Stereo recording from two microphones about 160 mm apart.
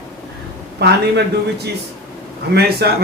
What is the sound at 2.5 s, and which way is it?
Speech, 80° right.